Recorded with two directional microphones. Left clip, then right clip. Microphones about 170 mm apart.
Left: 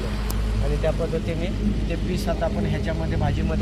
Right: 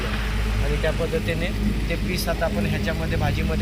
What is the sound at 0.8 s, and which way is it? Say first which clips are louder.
Speech: right 1 dB; 20° left (ahead or behind).